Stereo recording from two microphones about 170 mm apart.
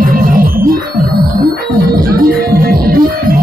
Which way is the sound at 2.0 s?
60° right (ahead or behind).